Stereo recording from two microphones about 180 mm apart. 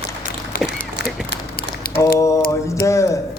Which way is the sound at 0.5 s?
55° left (ahead or behind).